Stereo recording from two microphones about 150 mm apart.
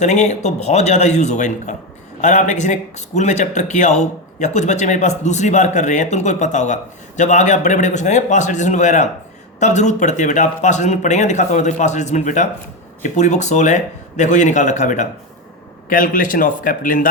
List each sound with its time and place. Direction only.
0.0 s a man's voice: 50° left (ahead or behind)